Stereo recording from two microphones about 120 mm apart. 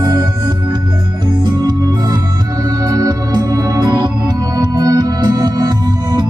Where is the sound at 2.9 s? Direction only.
35° right (ahead or behind).